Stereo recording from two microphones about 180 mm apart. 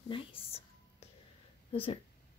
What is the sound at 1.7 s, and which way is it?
Speech, 35° left (ahead or behind).